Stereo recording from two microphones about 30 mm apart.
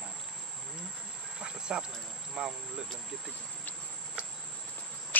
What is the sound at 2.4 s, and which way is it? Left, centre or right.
Speech, right.